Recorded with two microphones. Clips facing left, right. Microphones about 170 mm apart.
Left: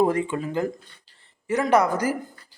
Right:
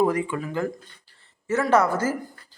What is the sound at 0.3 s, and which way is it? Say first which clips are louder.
A man's voice: left 1 dB; 25° left (ahead or behind).